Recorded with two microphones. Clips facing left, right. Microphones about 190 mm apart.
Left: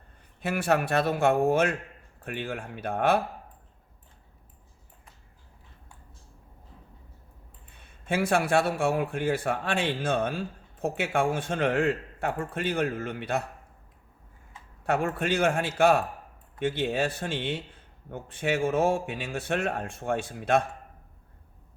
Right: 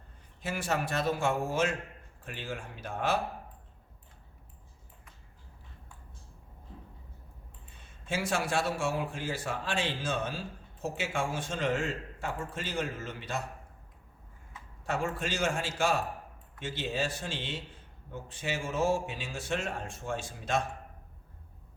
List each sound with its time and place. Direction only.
0.4 s a man's voice: 60° left (ahead or behind)
8.0 s a man's voice: 60° left (ahead or behind)
14.8 s a man's voice: 60° left (ahead or behind)